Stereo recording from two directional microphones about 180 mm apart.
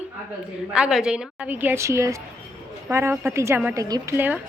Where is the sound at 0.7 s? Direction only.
5° right (ahead or behind).